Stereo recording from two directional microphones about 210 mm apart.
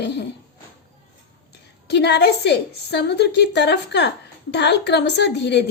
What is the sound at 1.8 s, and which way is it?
A woman's voice, 55° left (ahead or behind).